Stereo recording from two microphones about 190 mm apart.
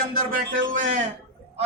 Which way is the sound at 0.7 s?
40° right (ahead or behind).